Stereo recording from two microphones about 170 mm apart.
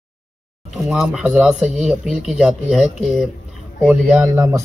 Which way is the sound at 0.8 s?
5° right (ahead or behind).